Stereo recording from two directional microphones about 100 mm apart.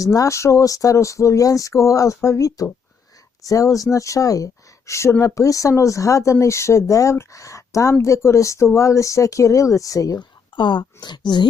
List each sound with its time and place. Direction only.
0.0 s speech: 35° left (ahead or behind)